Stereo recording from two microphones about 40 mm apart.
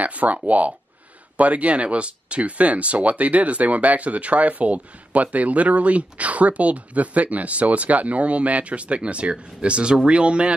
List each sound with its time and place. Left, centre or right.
0.0 s speech: right